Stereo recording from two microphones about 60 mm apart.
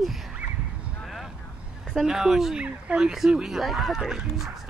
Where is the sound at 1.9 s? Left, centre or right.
Centre.